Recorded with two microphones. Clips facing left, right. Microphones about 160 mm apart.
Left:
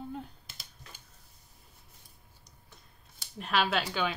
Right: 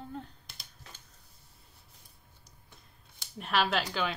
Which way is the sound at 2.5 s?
Centre (ahead or behind).